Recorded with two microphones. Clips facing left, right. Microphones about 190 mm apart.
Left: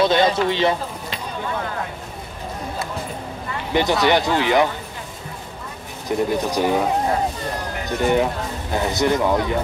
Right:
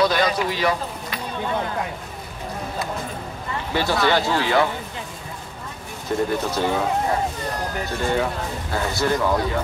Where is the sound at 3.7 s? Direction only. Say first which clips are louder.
Left 3 dB; 20° left (ahead or behind).